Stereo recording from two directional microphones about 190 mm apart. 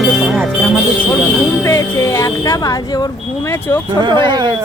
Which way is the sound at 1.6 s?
15° left (ahead or behind).